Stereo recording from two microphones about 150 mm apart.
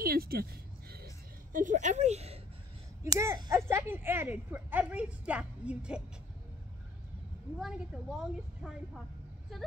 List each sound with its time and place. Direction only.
0.0 s a sound: 80° right
1.5 s speech: 60° right (ahead or behind); by 2.4 s 45° right (ahead or behind)
3.0 s speech: 20° right (ahead or behind)
7.5 s a woman's voice: centre (ahead or behind)